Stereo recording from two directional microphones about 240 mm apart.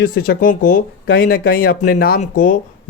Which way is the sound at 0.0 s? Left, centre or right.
Left.